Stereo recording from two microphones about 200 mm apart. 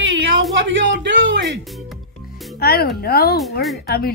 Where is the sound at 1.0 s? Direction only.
65° right (ahead or behind).